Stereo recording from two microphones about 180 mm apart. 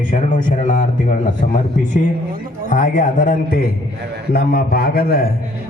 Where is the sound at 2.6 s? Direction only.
45° left (ahead or behind).